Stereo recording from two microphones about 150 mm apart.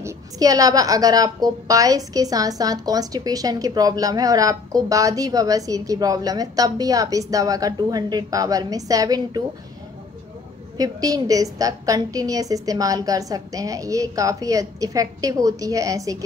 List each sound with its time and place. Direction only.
0.0 s a woman's voice: 25° right (ahead or behind)
10.8 s a woman's voice: 25° right (ahead or behind)